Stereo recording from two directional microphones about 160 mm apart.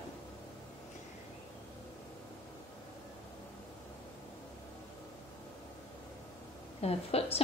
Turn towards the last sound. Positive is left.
turn(degrees=40)  # may be behind; listen again after turning